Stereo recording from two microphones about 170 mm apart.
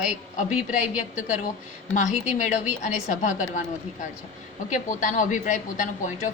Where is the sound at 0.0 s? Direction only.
45° left (ahead or behind).